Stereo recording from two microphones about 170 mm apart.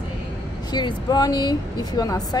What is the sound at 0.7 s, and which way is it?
Speech, 25° left (ahead or behind).